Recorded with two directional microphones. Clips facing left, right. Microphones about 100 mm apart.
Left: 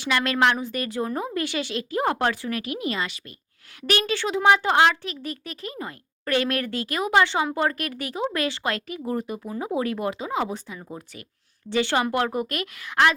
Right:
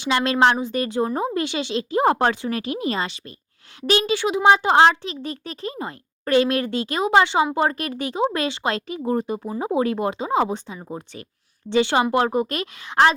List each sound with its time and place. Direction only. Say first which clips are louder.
0.0 s a child's voice: right 4 dB; 25° right (ahead or behind)